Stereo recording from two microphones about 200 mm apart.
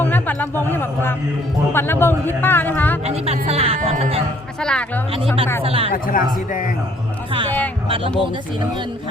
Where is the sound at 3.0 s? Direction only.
30° right (ahead or behind).